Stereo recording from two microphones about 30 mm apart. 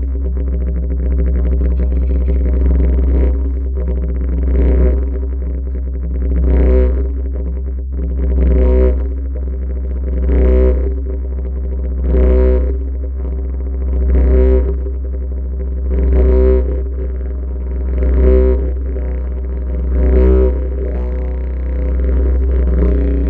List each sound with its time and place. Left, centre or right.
1.0 s music: left
6.2 s music: left
8.0 s didgeridoo: left
10.1 s a sound: left
12.0 s a sound: left
13.9 s music: left
15.9 s a sound: left
17.9 s didgeridoo: left
19.9 s music: left